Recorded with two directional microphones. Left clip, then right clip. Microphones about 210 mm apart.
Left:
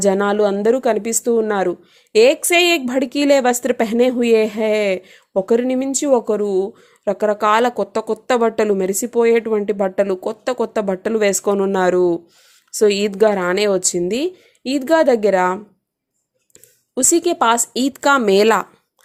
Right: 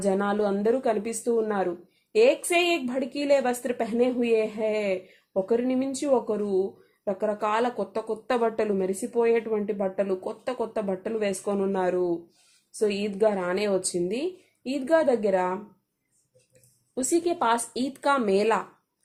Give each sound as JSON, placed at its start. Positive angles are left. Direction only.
{"t": 0.0, "sound": "a woman's voice", "side_deg": 35}
{"t": 16.9, "sound": "a woman's voice", "side_deg": 35}